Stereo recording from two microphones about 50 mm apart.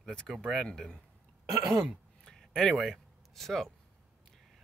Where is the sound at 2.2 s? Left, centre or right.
Centre.